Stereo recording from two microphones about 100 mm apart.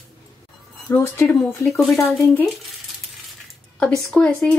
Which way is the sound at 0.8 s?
25° left (ahead or behind).